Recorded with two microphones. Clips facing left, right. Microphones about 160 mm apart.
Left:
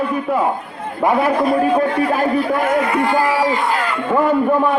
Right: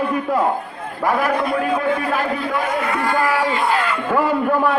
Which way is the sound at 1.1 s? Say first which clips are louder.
Left 3 dB; 30° left (ahead or behind).